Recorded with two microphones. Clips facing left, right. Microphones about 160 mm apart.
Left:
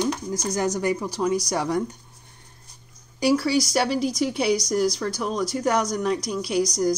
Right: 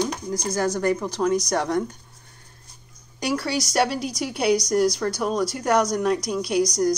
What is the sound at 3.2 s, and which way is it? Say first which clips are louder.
A woman's voice: left 5 dB; centre (ahead or behind).